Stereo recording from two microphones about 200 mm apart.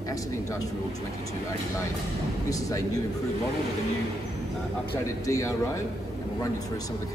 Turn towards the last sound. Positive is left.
turn(degrees=15)  # may be behind; listen again after turning